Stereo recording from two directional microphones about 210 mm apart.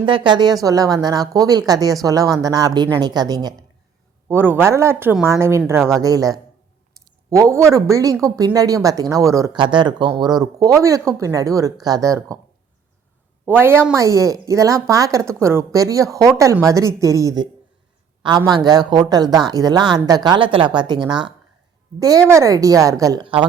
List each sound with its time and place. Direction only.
0.0 s a woman's voice: 25° right (ahead or behind)
13.4 s a woman's voice: 10° right (ahead or behind)
22.3 s a woman's voice: 15° right (ahead or behind)